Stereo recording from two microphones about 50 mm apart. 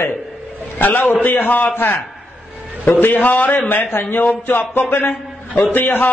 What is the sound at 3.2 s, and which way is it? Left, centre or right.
Speech, left.